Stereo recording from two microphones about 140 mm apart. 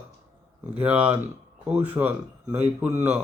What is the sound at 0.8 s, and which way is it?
A man's voice, 10° right (ahead or behind).